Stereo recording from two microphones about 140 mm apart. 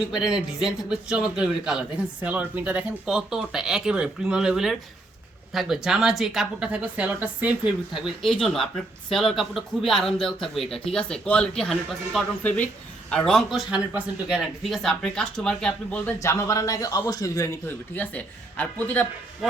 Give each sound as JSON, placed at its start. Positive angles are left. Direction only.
{"t": 0.1, "sound": "speech", "side_deg": -5}
{"t": 16.2, "sound": "a man's voice", "side_deg": 20}
{"t": 17.9, "sound": "speech", "side_deg": 10}